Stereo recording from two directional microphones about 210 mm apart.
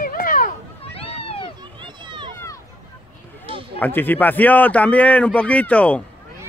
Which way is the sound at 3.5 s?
25° right (ahead or behind).